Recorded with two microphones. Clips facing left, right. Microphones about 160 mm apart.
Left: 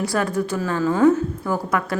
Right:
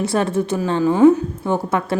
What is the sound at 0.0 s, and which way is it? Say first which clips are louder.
A woman's voice: right 3 dB; 25° right (ahead or behind).